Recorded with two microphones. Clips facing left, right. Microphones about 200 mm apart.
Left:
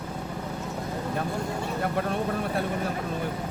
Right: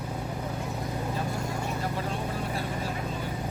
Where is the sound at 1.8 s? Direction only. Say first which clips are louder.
Left 4 dB; 60° left (ahead or behind).